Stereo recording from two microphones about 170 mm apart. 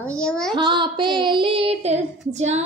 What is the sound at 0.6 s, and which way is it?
Child singing, 30° right (ahead or behind).